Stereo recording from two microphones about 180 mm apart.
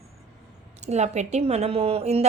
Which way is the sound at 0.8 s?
40° right (ahead or behind).